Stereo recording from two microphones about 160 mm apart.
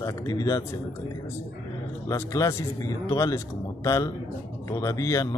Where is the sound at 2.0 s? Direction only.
20° left (ahead or behind).